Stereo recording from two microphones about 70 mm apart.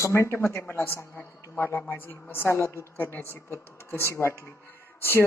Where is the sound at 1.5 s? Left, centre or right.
Left.